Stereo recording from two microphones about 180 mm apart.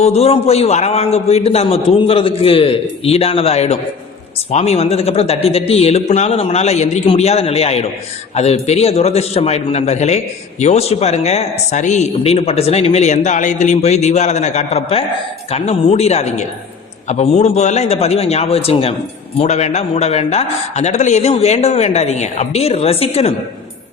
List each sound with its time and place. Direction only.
0.0 s a man's voice: 35° left (ahead or behind)